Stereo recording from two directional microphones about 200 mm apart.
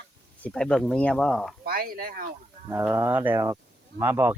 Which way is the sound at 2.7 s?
15° right (ahead or behind).